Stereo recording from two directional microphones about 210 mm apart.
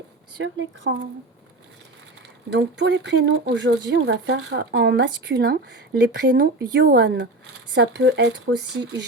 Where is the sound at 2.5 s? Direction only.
55° right (ahead or behind).